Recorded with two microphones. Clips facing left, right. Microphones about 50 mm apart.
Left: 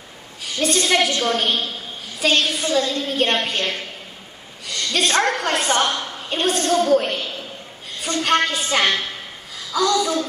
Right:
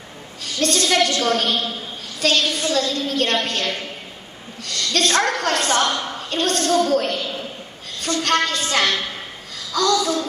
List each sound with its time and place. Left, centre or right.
0.4 s a woman's voice: centre
8.2 s a woman's voice: centre